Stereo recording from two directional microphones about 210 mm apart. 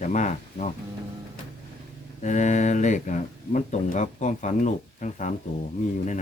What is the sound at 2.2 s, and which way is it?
Speech, 35° left (ahead or behind).